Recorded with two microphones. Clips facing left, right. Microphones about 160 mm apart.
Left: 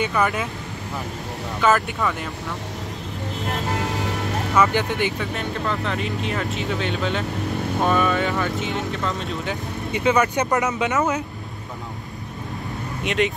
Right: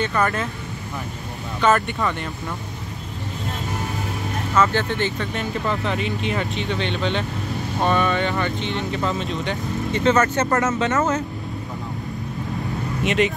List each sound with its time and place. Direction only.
0.0 s speech: 5° left (ahead or behind)
1.6 s speech: 5° left (ahead or behind)
3.7 s vehicle: 80° left
4.6 s speech: 10° left (ahead or behind)
5.3 s speech: centre (ahead or behind); by 11.0 s 15° left (ahead or behind)
13.0 s speech: centre (ahead or behind)